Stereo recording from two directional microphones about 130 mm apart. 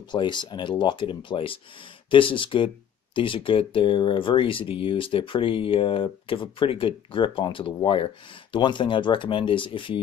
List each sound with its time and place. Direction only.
0.1 s speech: 35° left (ahead or behind)